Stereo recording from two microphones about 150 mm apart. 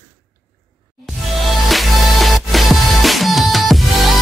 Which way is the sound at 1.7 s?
Centre (ahead or behind).